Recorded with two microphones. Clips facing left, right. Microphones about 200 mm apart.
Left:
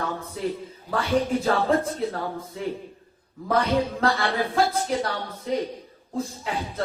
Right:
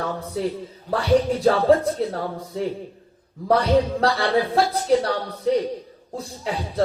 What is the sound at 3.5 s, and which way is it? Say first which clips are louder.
Speech: right 4 dB; 35° right (ahead or behind).